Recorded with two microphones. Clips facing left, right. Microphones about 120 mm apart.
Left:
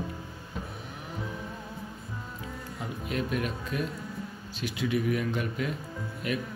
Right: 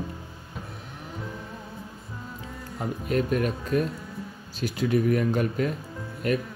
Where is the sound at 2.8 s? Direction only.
45° right (ahead or behind).